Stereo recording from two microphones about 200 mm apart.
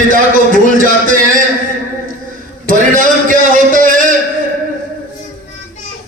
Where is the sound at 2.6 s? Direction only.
40° right (ahead or behind).